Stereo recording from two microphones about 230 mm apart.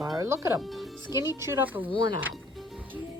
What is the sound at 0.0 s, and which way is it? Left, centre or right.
Music, centre.